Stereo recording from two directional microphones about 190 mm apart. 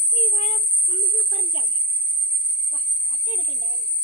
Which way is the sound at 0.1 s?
35° left (ahead or behind).